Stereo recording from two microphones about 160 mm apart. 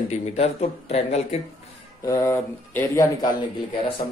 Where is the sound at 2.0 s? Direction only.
20° left (ahead or behind).